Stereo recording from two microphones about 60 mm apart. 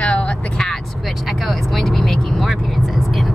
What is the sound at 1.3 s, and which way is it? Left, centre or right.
Vehicle, centre.